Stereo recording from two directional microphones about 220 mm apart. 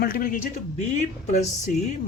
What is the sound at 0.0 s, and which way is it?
Speech, 40° left (ahead or behind).